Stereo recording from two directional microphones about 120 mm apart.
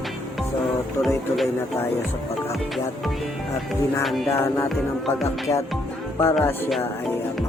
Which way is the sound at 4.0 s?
Centre (ahead or behind).